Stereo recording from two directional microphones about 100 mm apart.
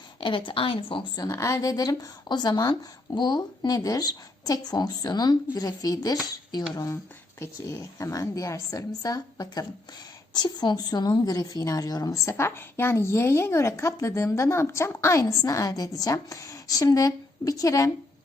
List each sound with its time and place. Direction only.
0.2 s a woman's voice: 55° left (ahead or behind)
1.1 s a woman's voice: 35° left (ahead or behind)
12.3 s a woman's voice: 25° left (ahead or behind)